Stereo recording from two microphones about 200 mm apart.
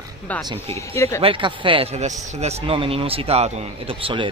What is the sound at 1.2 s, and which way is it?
Speech, 25° right (ahead or behind).